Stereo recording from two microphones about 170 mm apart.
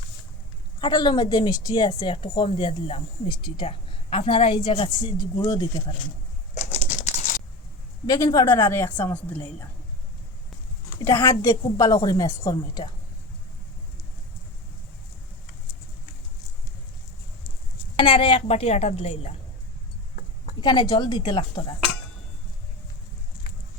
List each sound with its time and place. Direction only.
0.8 s a woman's voice: 25° left (ahead or behind)
6.5 s a sound: 40° left (ahead or behind)
8.0 s a woman's voice: 20° left (ahead or behind)
10.8 s a woman's voice: 15° left (ahead or behind)
17.9 s speech: 30° left (ahead or behind)
20.6 s a woman's voice: 25° left (ahead or behind)